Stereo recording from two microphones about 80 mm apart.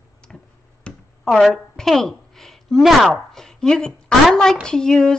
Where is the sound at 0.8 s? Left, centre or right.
Centre.